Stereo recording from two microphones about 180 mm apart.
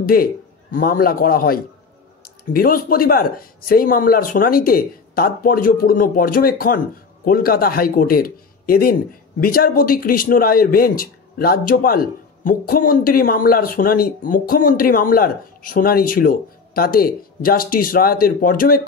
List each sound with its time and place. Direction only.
0.0 s a man's voice: 55° left (ahead or behind)